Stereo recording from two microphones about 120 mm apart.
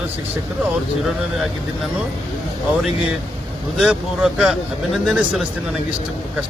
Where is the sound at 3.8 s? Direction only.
5° right (ahead or behind).